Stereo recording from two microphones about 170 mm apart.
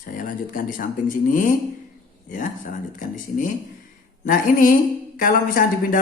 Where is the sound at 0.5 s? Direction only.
55° left (ahead or behind).